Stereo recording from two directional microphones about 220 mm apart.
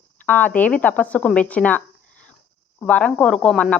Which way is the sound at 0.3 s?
10° left (ahead or behind).